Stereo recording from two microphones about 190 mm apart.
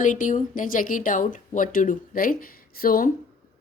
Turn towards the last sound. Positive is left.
turn(degrees=50)  # may be behind; listen again after turning